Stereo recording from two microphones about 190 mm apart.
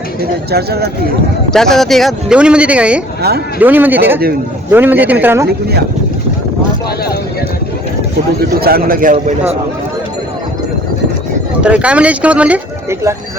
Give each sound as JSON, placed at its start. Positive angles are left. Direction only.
{"t": 0.5, "sound": "speech", "side_deg": -55}
{"t": 1.5, "sound": "speech", "side_deg": 0}
{"t": 3.2, "sound": "speech", "side_deg": -55}
{"t": 3.6, "sound": "speech", "side_deg": -10}
{"t": 5.5, "sound": "speech", "side_deg": -55}
{"t": 8.4, "sound": "a man's voice", "side_deg": -55}
{"t": 11.6, "sound": "speech", "side_deg": -5}